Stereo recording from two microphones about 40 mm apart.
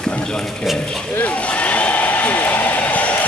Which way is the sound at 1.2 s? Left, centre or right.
Left.